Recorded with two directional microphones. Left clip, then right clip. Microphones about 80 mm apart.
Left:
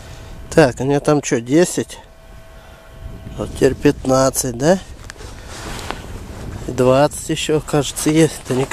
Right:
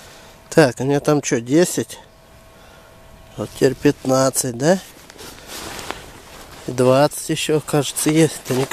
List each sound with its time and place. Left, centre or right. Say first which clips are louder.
0.5 s speech: left 1 dB; centre
3.3 s speech: left 2 dB; centre
5.9 s walk: left 3 dB; centre
6.7 s speech: left 1 dB; centre